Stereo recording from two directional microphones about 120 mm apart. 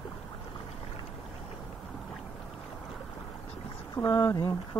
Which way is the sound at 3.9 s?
30° left (ahead or behind).